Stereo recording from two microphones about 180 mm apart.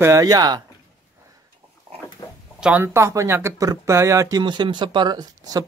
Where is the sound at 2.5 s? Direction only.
5° right (ahead or behind).